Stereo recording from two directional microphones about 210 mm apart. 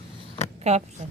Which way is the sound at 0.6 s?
30° right (ahead or behind).